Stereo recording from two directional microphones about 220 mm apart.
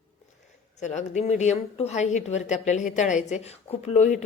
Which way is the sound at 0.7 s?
30° left (ahead or behind).